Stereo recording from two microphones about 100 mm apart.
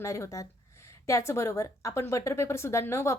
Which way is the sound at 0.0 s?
30° left (ahead or behind).